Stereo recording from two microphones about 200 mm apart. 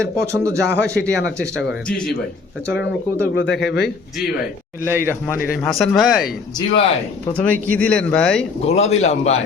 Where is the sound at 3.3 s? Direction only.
60° left (ahead or behind).